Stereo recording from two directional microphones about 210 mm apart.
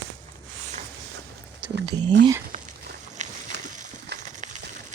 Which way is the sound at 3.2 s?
35° right (ahead or behind).